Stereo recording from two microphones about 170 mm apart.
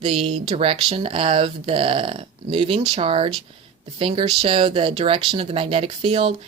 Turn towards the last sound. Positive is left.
turn(degrees=-30)  # may be behind; listen again after turning